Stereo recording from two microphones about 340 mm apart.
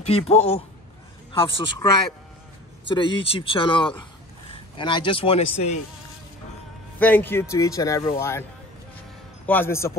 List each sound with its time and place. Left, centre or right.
0.0 s speech: centre
7.0 s speech: centre
9.5 s speech: centre